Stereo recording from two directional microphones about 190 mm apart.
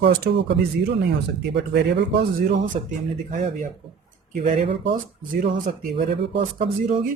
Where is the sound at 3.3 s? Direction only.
40° right (ahead or behind).